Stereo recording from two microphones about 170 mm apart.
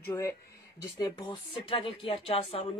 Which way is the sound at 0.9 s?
30° left (ahead or behind).